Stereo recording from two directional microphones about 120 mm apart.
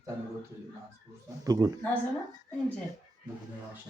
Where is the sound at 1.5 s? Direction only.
30° right (ahead or behind).